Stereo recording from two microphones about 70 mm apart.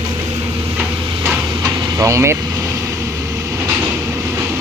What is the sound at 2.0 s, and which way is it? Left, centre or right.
Speech, right.